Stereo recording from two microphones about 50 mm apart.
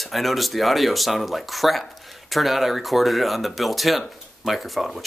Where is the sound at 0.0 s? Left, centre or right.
Centre.